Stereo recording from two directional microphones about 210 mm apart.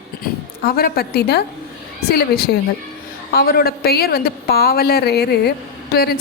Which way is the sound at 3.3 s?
45° left (ahead or behind).